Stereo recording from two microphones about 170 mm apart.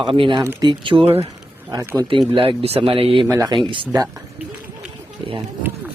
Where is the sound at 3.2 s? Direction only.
15° right (ahead or behind).